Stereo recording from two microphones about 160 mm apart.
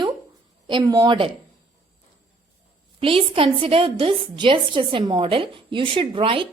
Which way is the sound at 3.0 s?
35° right (ahead or behind).